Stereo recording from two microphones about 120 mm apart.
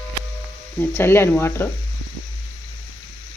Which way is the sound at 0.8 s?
20° left (ahead or behind).